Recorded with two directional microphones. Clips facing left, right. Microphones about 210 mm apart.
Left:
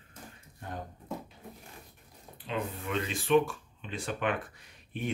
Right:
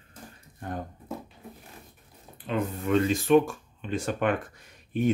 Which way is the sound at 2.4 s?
45° right (ahead or behind).